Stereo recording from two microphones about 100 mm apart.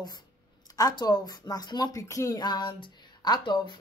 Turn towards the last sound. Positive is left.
turn(degrees=50)  # may be behind; listen again after turning